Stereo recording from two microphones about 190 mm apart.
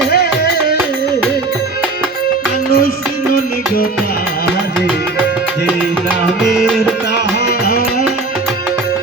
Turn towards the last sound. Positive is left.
turn(degrees=55)  # may be behind; listen again after turning